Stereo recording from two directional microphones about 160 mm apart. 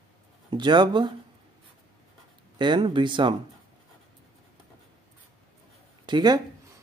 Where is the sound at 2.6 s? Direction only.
30° right (ahead or behind).